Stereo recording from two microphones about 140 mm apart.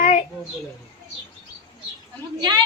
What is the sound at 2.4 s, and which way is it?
Speech, 30° right (ahead or behind).